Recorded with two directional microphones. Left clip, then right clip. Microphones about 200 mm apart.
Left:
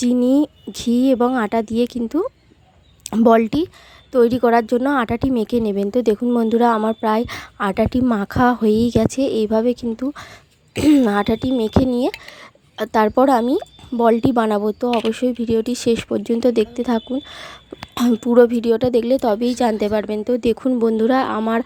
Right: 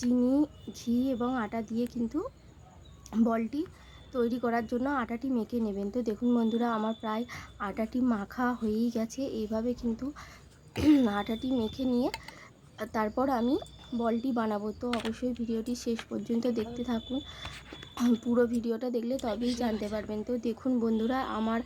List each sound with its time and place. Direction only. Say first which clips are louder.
0.0 s a woman's voice: left 11 dB; 40° left (ahead or behind)